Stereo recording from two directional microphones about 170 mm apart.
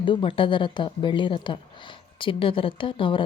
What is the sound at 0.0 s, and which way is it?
A woman's voice, 30° left (ahead or behind).